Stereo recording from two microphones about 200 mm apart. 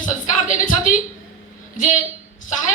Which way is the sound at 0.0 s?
40° left (ahead or behind).